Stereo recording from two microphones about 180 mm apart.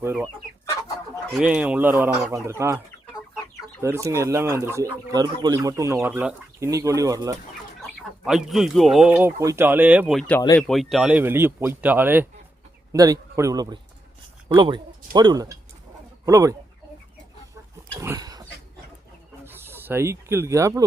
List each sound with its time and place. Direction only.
0.0 s chicken: 15° right (ahead or behind)
1.4 s speech: 5° right (ahead or behind)
8.2 s speech: centre (ahead or behind); by 16.6 s 15° right (ahead or behind)
18.0 s dog: 20° right (ahead or behind)
19.5 s speech: 10° right (ahead or behind)